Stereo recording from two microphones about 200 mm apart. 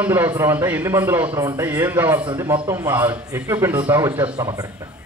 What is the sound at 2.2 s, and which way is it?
A man's voice, 20° right (ahead or behind).